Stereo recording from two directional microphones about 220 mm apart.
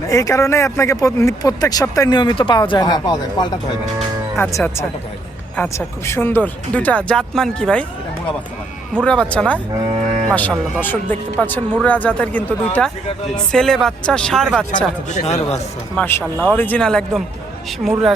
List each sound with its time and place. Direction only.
0.1 s speech: 15° left (ahead or behind)
9.0 s speech: 5° left (ahead or behind)
9.7 s cattle: 25° right (ahead or behind)
10.3 s speech: 5° left (ahead or behind)
15.1 s speech: 30° left (ahead or behind)
16.0 s speech: 5° left (ahead or behind)